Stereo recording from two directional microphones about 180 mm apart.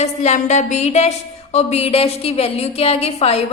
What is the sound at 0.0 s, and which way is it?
A woman's voice, 40° left (ahead or behind).